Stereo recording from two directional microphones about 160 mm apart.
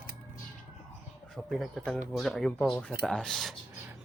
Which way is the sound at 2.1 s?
Centre (ahead or behind).